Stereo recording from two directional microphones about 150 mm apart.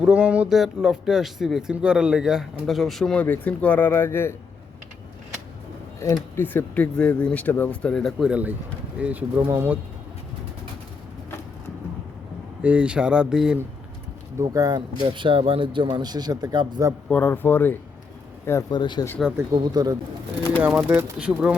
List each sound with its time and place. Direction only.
0.0 s speech: 5° right (ahead or behind); by 4.4 s 15° left (ahead or behind)
6.3 s speech: 15° left (ahead or behind); by 9.7 s 15° right (ahead or behind)
12.6 s speech: 10° right (ahead or behind)
14.3 s speech: 25° right (ahead or behind)
17.1 s speech: 15° left (ahead or behind)
18.7 s speech: 30° left (ahead or behind)
19.5 s speech: 25° right (ahead or behind)
20.6 s speech: 10° right (ahead or behind)